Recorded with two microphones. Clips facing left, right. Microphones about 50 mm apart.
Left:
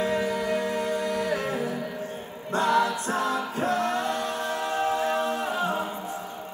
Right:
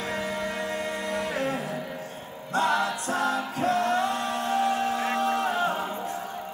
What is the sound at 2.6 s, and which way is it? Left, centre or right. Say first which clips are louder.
Music: left 2 dB; right.